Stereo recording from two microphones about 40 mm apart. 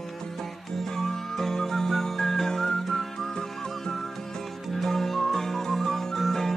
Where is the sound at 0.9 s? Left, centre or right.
Centre.